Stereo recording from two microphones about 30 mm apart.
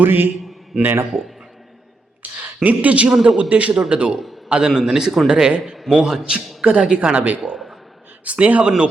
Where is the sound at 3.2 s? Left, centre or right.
Right.